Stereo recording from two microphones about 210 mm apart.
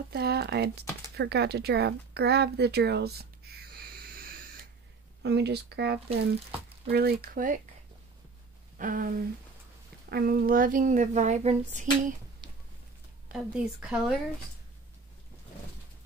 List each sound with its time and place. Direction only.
0.1 s speech: 50° right (ahead or behind)
1.1 s a sound: 50° right (ahead or behind)
5.2 s speech: 50° right (ahead or behind)
8.7 s speech: 40° right (ahead or behind)
13.3 s speech: 5° right (ahead or behind)